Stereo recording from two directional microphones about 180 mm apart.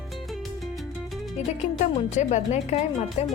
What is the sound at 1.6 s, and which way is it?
Speech, 35° left (ahead or behind).